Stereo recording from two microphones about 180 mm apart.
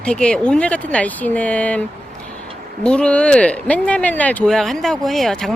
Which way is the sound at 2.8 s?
5° left (ahead or behind).